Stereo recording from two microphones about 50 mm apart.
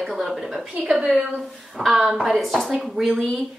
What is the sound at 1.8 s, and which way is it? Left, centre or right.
Speech, centre.